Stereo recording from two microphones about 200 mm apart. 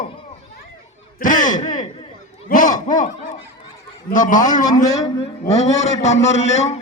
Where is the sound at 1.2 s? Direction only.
40° left (ahead or behind).